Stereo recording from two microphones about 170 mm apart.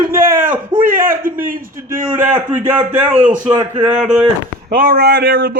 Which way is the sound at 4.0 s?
5° right (ahead or behind).